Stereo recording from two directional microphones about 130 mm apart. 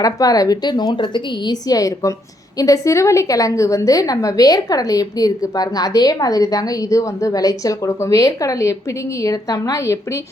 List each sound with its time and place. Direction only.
0.0 s a woman's voice: 25° left (ahead or behind)